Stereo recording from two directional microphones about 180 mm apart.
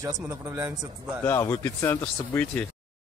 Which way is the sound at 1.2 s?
15° left (ahead or behind).